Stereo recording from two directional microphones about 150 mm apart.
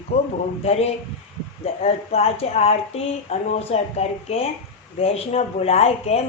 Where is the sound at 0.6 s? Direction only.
45° left (ahead or behind).